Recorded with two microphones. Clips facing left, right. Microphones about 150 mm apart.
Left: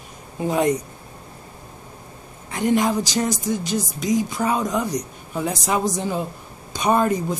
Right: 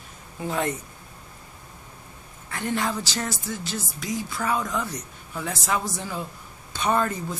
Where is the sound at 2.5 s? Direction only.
15° left (ahead or behind).